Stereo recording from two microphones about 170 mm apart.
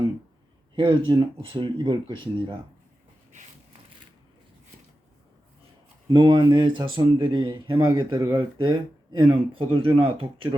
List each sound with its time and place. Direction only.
0.8 s speech: 30° right (ahead or behind)
6.1 s speech: 25° right (ahead or behind)
9.4 s speech: 30° right (ahead or behind)